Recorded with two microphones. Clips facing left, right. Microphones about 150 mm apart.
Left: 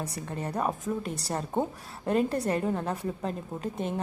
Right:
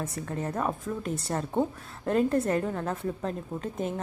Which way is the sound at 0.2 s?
10° left (ahead or behind).